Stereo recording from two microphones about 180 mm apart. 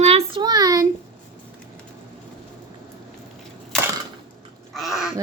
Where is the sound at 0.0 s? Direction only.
35° right (ahead or behind).